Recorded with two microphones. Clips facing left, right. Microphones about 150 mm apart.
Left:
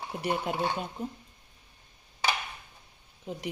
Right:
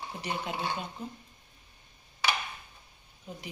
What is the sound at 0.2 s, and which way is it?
Speech, 50° left (ahead or behind).